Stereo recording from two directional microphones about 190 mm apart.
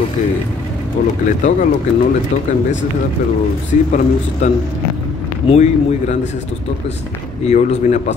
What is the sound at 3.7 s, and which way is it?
Speech, 40° left (ahead or behind).